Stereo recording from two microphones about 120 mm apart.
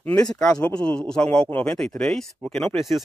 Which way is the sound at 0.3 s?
5° left (ahead or behind).